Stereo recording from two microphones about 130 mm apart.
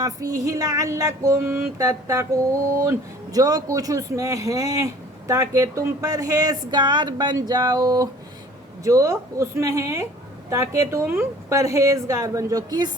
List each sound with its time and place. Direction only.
0.0 s speech: 25° right (ahead or behind)
3.3 s speech: 30° right (ahead or behind)